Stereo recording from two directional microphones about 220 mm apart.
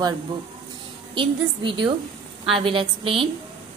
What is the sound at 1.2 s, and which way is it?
A woman's voice, 20° right (ahead or behind).